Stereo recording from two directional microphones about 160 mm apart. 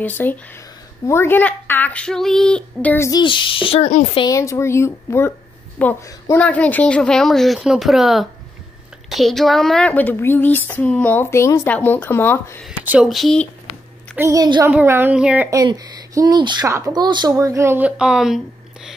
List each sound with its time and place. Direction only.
0.0 s speech: 10° left (ahead or behind)
3.1 s speech: 30° left (ahead or behind)
4.2 s a woman's voice: 20° left (ahead or behind)
12.6 s speech: 5° right (ahead or behind)
14.1 s speech: 20° right (ahead or behind)
14.6 s speech: 10° right (ahead or behind)
15.5 s speech: 20° right (ahead or behind); by 18.4 s 5° right (ahead or behind)